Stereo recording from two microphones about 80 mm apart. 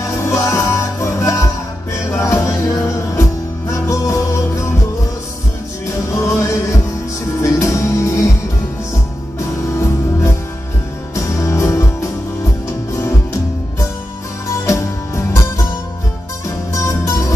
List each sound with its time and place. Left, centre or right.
0.0 s music: left
6.1 s music: left
11.1 s music: left
16.7 s music: left